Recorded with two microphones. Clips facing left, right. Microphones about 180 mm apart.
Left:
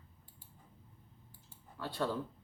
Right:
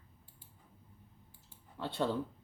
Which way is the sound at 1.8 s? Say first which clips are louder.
Right 2 dB; 20° right (ahead or behind).